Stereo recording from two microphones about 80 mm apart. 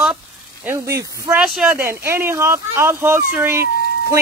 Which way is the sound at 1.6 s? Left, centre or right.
Right.